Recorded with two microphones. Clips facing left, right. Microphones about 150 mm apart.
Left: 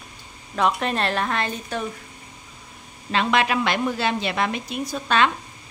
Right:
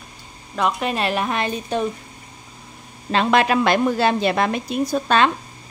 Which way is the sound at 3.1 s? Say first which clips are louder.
Right 4 dB; 40° right (ahead or behind).